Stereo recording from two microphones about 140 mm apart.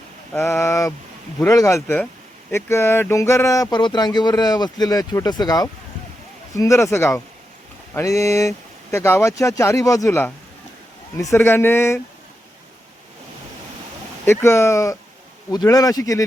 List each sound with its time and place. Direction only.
0.3 s speech: 15° left (ahead or behind)
14.3 s speech: 20° left (ahead or behind)